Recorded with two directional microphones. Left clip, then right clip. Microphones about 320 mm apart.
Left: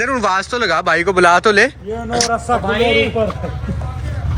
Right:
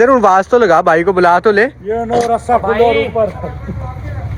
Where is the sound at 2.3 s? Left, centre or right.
Centre.